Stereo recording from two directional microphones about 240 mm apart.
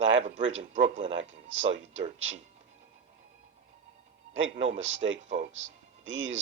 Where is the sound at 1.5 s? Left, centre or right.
Right.